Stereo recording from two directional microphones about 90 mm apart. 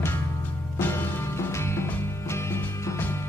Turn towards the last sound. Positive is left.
turn(degrees=25)  # may be behind; listen again after turning